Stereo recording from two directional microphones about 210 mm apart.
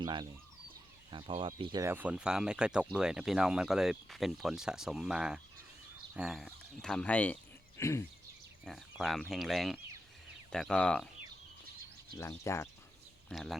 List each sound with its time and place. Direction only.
0.0 s speech: 20° right (ahead or behind)
1.8 s speech: 10° right (ahead or behind); by 7.3 s 5° left (ahead or behind)
7.8 s a sound: 15° left (ahead or behind)
8.6 s speech: centre (ahead or behind)
12.1 s speech: 15° left (ahead or behind)
13.2 s speech: centre (ahead or behind)